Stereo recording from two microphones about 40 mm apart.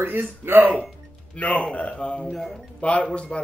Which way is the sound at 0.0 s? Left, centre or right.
Right.